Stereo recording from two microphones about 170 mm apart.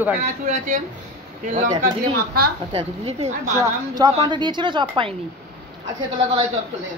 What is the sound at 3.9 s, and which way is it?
Speech, 25° right (ahead or behind).